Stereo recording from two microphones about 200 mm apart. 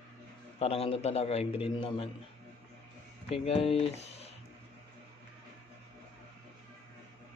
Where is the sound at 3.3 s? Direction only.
30° left (ahead or behind).